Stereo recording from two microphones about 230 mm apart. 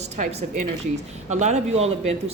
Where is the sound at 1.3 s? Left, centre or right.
Right.